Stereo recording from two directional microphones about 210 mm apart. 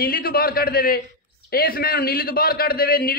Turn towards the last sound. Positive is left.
turn(degrees=45)  # may be behind; listen again after turning